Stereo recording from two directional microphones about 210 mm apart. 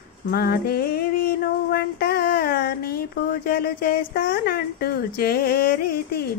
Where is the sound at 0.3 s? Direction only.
45° left (ahead or behind).